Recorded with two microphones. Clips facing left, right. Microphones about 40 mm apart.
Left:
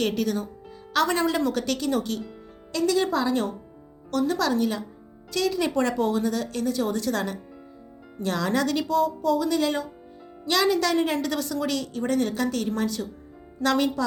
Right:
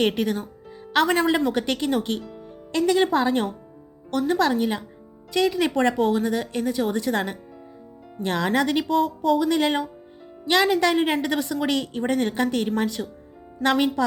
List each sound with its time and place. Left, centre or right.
0.0 s a woman's voice: right
4.1 s a woman's voice: right